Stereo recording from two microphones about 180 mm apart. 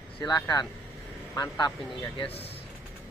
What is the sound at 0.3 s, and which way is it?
A man's voice, 20° left (ahead or behind).